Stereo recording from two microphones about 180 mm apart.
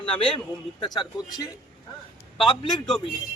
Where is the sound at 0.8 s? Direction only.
25° left (ahead or behind).